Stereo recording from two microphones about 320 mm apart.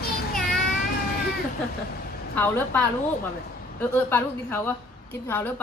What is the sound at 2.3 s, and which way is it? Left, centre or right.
A woman's voice, centre.